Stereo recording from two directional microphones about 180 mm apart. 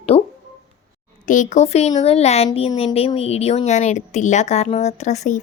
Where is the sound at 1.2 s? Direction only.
45° left (ahead or behind).